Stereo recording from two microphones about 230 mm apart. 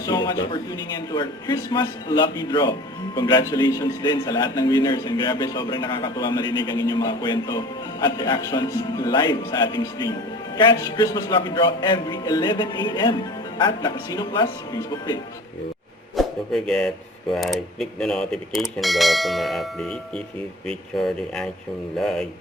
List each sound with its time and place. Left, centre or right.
0.0 s a man's voice: centre
16.1 s speech: centre